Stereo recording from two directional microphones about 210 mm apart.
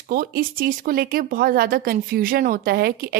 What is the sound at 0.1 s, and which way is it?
A woman's voice, 40° right (ahead or behind).